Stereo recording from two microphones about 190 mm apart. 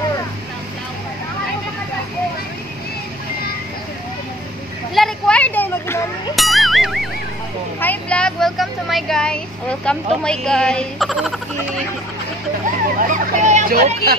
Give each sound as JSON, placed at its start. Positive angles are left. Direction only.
{"t": 4.9, "sound": "a sound", "side_deg": 0}
{"t": 6.3, "sound": "music", "side_deg": 0}
{"t": 7.8, "sound": "speech", "side_deg": 10}
{"t": 13.0, "sound": "speech", "side_deg": -40}